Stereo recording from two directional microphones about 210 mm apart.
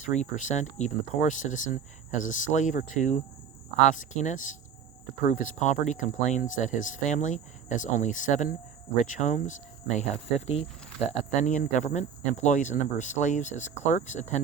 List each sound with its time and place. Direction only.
0.1 s speech: 35° left (ahead or behind)